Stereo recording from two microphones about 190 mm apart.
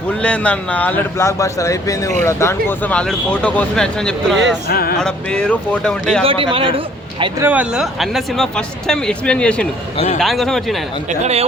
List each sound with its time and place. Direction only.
0.2 s speech: 5° left (ahead or behind)
4.7 s speech: 50° left (ahead or behind)
4.9 s speech: 5° left (ahead or behind)
6.2 s speech: 30° right (ahead or behind)
7.3 s speech: 10° right (ahead or behind)
11.1 s speech: 35° right (ahead or behind)